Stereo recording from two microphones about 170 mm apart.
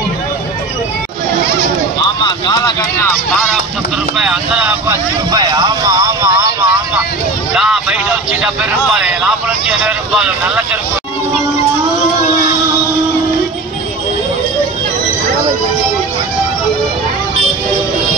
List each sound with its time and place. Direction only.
2.0 s a sound: 25° left (ahead or behind)
4.2 s speech: 5° right (ahead or behind)
5.3 s speech: 25° right (ahead or behind)
7.5 s speech: 5° right (ahead or behind)